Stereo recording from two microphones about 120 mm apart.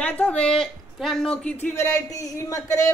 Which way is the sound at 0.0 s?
15° left (ahead or behind).